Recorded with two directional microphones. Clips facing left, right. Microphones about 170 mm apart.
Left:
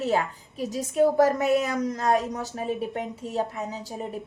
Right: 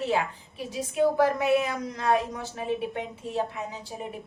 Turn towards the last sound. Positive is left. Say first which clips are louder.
# left 2 dB
turn(degrees=40)  # may be behind; listen again after turning